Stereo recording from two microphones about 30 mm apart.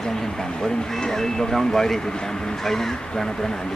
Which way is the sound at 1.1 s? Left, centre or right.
Centre.